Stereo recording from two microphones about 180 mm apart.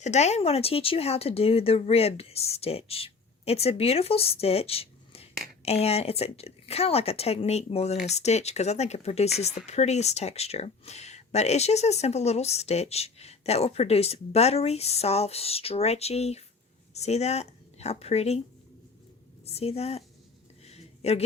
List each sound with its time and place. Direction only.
0.0 s speech: 40° left (ahead or behind)
19.5 s speech: 35° left (ahead or behind)
20.7 s a sound: 35° left (ahead or behind)